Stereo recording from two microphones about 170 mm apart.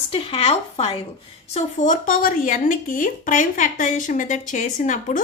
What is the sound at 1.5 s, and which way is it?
Speech, 45° left (ahead or behind).